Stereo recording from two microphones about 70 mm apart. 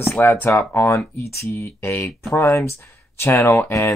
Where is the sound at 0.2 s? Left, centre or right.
Left.